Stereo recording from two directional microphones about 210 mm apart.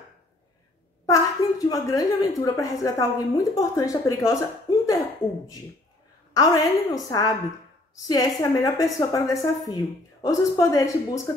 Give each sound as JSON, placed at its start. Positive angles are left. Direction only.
{"t": 1.0, "sound": "a woman's voice", "side_deg": 15}
{"t": 6.3, "sound": "a woman's voice", "side_deg": 15}